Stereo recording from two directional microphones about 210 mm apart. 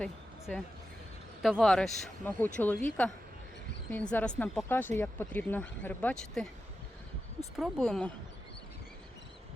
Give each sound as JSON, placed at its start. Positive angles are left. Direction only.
{"t": 0.0, "sound": "a sound", "side_deg": 5}
{"t": 1.4, "sound": "speech", "side_deg": 0}
{"t": 3.9, "sound": "speech", "side_deg": 10}
{"t": 7.5, "sound": "speech", "side_deg": 0}